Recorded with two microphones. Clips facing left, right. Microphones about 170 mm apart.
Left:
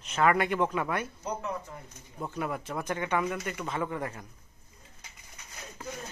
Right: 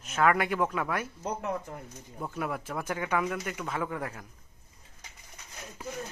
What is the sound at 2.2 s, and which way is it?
Speech, centre (ahead or behind).